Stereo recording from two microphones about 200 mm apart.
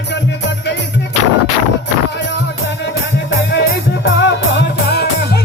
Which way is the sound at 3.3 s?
60° left (ahead or behind).